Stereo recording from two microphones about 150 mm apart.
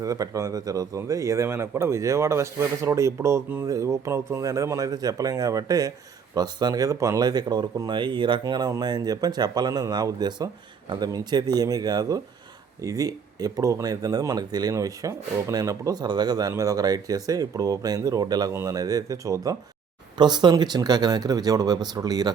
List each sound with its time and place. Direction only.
0.0 s speech: 25° right (ahead or behind)